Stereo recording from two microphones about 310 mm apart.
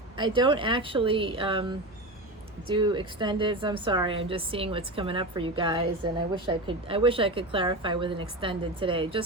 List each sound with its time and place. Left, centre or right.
0.2 s a woman's voice: centre